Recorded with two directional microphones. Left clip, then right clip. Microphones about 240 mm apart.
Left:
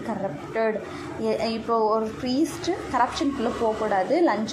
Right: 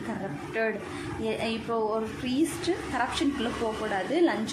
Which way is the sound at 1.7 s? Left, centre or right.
Centre.